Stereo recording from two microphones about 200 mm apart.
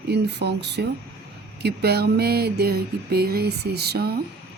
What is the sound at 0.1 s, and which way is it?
Speech, 55° right (ahead or behind).